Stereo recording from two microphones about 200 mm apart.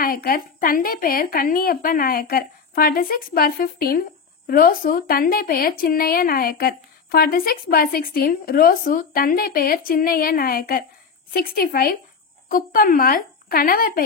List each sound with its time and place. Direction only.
0.0 s speech: 45° left (ahead or behind)